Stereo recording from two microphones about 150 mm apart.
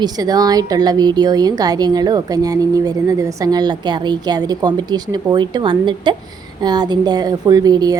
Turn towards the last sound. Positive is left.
turn(degrees=-25)  # may be behind; listen again after turning